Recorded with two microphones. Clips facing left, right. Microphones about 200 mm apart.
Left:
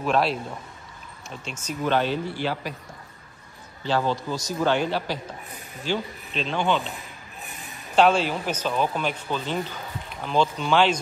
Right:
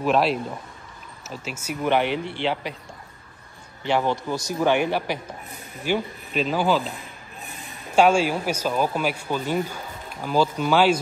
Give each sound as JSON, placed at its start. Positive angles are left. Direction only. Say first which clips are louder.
{"t": 0.0, "sound": "speech", "louder": "right 2 dB", "side_deg": 0}
{"t": 3.8, "sound": "speech", "louder": "right 2 dB", "side_deg": -15}
{"t": 7.9, "sound": "speech", "louder": "right 2 dB", "side_deg": -10}